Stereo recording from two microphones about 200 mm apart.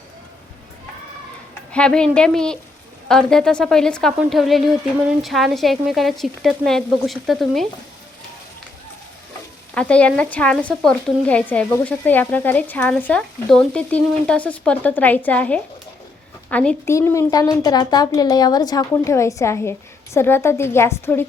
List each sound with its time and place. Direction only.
1.7 s speech: 5° left (ahead or behind)
9.7 s speech: 5° left (ahead or behind)